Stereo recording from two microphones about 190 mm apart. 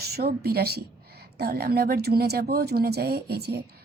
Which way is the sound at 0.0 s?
55° right (ahead or behind).